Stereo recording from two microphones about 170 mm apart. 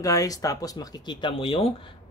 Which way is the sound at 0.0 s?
20° left (ahead or behind).